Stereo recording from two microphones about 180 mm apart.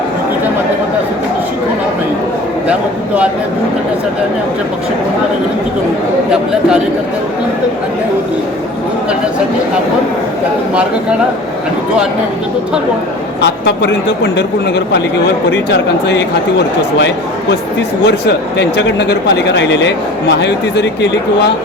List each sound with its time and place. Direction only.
13.4 s speech: 70° left (ahead or behind)
15.4 s speech: 75° left (ahead or behind)
18.0 s speech: 70° left (ahead or behind)